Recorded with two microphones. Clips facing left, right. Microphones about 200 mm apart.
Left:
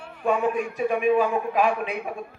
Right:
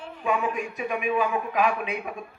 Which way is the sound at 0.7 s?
35° left (ahead or behind).